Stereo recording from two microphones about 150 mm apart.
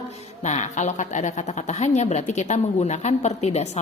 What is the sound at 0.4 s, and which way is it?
A woman's voice, 50° left (ahead or behind).